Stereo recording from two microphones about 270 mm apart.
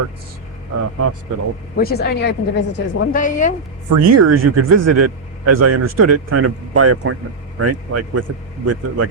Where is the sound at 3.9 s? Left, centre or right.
Right.